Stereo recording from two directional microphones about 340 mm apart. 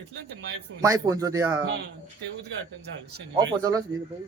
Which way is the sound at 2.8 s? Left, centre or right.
Right.